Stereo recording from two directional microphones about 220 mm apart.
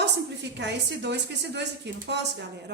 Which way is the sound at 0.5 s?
50° right (ahead or behind).